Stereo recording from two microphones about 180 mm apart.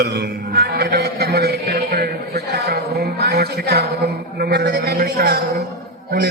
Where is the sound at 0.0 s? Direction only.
65° right (ahead or behind).